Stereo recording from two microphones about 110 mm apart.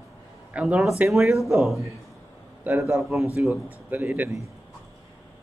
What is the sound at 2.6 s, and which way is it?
A man's voice, 25° right (ahead or behind).